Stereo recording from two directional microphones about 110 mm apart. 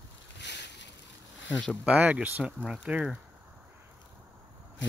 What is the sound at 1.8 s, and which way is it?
Speech, 15° right (ahead or behind).